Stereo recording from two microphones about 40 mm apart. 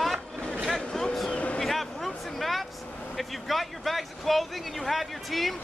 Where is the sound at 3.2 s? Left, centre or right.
Centre.